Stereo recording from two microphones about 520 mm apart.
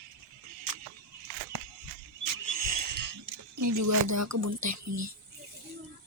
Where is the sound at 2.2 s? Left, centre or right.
Right.